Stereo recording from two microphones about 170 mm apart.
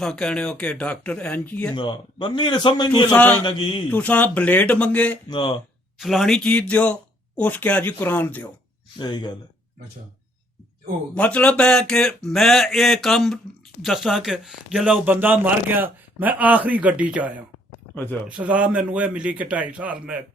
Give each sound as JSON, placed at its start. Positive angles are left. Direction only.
{"t": 0.0, "sound": "speech", "side_deg": 0}
{"t": 1.7, "sound": "a man's voice", "side_deg": 25}
{"t": 3.1, "sound": "speech", "side_deg": 10}
{"t": 3.4, "sound": "a man's voice", "side_deg": 30}
{"t": 3.8, "sound": "speech", "side_deg": 10}
{"t": 5.3, "sound": "a man's voice", "side_deg": 25}
{"t": 6.0, "sound": "speech", "side_deg": 0}
{"t": 9.0, "sound": "a man's voice", "side_deg": 25}
{"t": 11.1, "sound": "speech", "side_deg": 5}
{"t": 17.9, "sound": "speech", "side_deg": 10}
{"t": 18.3, "sound": "speech", "side_deg": -5}